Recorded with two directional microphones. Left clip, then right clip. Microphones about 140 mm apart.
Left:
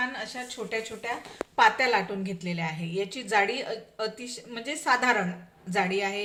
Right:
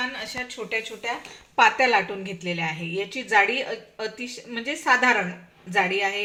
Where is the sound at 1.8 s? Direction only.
30° right (ahead or behind).